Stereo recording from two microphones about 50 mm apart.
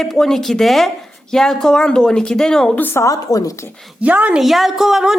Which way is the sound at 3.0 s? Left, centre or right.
Left.